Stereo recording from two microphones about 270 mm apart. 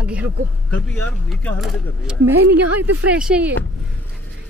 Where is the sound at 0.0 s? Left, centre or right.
Centre.